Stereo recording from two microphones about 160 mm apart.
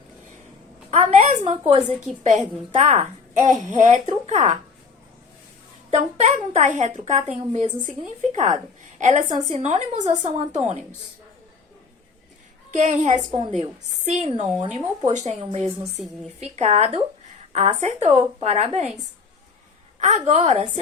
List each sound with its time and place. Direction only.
0.9 s a woman's voice: 45° right (ahead or behind)
5.9 s a woman's voice: 45° right (ahead or behind)
12.7 s a woman's voice: 45° right (ahead or behind)
13.3 s a woman's voice: 35° right (ahead or behind)
20.0 s a woman's voice: 45° right (ahead or behind)